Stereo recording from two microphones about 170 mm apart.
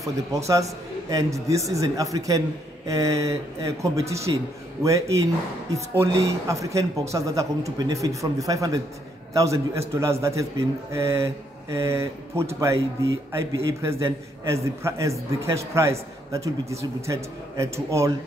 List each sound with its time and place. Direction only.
1.1 s a man's voice: 20° right (ahead or behind)